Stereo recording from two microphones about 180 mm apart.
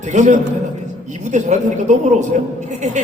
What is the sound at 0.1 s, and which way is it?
A man's voice, 40° right (ahead or behind).